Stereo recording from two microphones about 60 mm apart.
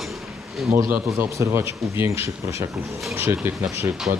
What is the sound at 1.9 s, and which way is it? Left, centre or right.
Speech, right.